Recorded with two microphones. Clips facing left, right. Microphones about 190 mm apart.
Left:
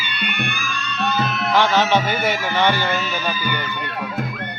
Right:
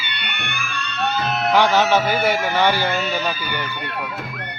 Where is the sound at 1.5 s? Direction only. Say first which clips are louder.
Right 1 dB; 15° right (ahead or behind).